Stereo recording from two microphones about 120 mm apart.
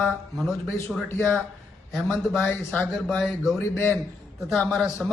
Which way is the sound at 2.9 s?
Centre (ahead or behind).